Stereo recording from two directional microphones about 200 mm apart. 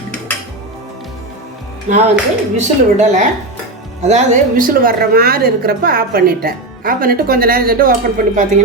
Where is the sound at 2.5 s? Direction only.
35° right (ahead or behind).